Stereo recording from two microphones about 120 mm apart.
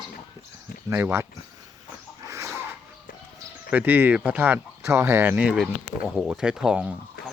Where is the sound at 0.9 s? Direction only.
20° right (ahead or behind).